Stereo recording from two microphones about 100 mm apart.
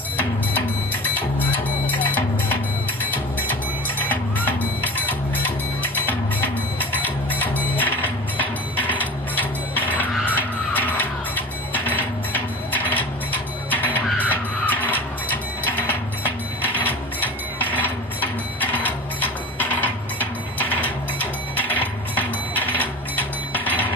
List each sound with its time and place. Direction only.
3.5 s music: 15° left (ahead or behind)
15.6 s a sound: 20° left (ahead or behind)
21.5 s music: 15° left (ahead or behind)